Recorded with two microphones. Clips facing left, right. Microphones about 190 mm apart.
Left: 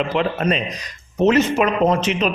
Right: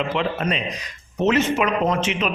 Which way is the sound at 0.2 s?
45° left (ahead or behind).